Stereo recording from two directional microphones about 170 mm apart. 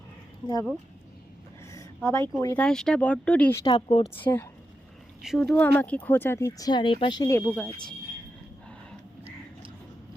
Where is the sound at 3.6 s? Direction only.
35° left (ahead or behind).